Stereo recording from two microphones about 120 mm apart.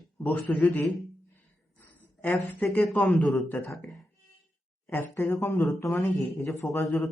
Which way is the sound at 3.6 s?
25° left (ahead or behind).